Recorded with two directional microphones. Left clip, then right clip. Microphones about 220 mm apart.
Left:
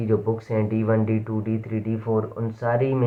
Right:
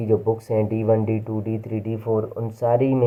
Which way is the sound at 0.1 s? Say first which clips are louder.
Right 3 dB; 20° right (ahead or behind).